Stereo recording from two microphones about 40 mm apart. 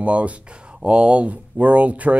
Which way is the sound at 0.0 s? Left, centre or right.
Right.